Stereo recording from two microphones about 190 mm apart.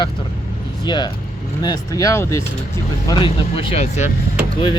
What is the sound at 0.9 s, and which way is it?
Speech, 25° left (ahead or behind).